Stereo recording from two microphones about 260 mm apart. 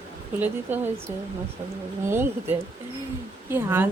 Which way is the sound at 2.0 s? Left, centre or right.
Centre.